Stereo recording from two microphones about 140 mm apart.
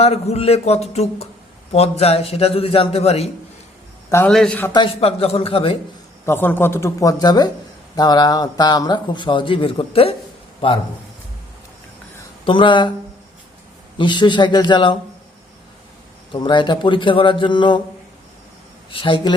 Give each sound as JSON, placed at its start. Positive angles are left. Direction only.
{"t": 0.0, "sound": "a man's voice", "side_deg": 50}
{"t": 4.3, "sound": "a man's voice", "side_deg": 5}
{"t": 4.7, "sound": "a man's voice", "side_deg": 40}
{"t": 6.2, "sound": "a man's voice", "side_deg": 15}
{"t": 12.5, "sound": "a man's voice", "side_deg": 35}
{"t": 14.0, "sound": "a man's voice", "side_deg": 35}
{"t": 16.3, "sound": "a man's voice", "side_deg": 35}
{"t": 18.9, "sound": "a man's voice", "side_deg": 35}